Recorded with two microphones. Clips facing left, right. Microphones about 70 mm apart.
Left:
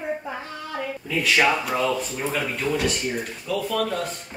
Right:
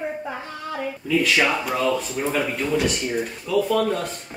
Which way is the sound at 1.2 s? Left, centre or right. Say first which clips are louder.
Left 2 dB; centre.